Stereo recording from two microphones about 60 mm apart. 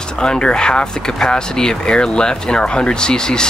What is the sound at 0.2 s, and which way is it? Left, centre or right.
Speech, centre.